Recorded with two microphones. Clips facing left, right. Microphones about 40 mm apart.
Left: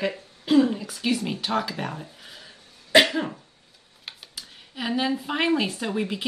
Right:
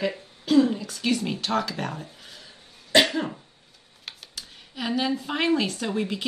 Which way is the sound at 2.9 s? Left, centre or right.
Centre.